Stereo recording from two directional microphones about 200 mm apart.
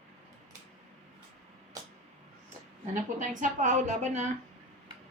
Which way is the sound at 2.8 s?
40° right (ahead or behind).